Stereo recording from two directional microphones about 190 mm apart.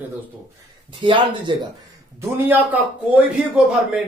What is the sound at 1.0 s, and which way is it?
Speech, 25° right (ahead or behind).